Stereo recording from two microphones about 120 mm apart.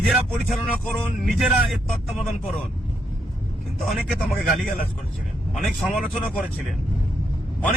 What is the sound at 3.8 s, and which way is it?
Speech, centre (ahead or behind).